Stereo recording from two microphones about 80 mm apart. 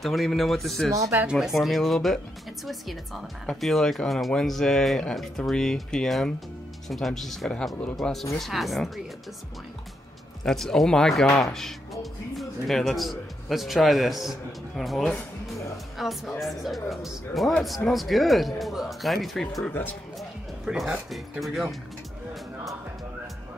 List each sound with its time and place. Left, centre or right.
0.0 s speech: centre
0.9 s speech: right
1.2 s speech: centre
10.4 s a man's voice: centre
19.7 s speech: left
20.2 s speech: centre